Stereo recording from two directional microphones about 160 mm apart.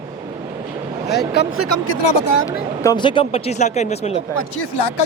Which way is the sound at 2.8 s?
30° left (ahead or behind).